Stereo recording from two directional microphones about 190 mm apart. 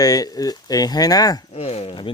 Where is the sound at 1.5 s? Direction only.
30° left (ahead or behind).